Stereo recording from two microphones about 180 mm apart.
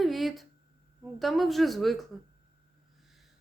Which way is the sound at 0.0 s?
Centre (ahead or behind).